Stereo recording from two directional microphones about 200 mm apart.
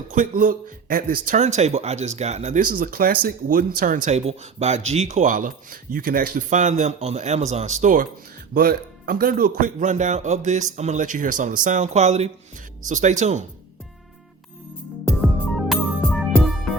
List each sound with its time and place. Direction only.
0.1 s speech: 40° right (ahead or behind)
8.5 s speech: 50° right (ahead or behind)
15.2 s music: centre (ahead or behind)